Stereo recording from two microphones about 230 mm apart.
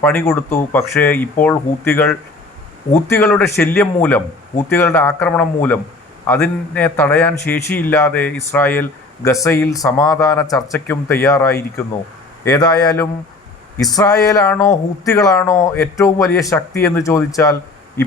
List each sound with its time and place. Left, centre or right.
0.0 s a man's voice: centre